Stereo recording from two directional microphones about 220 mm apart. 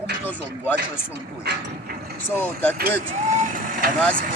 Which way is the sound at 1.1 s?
50° right (ahead or behind).